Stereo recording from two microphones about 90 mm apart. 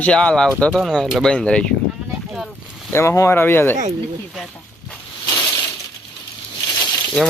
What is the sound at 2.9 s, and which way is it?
Speech, 30° left (ahead or behind).